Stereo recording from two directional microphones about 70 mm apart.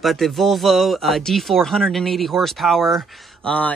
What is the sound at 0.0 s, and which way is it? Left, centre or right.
Speech, centre.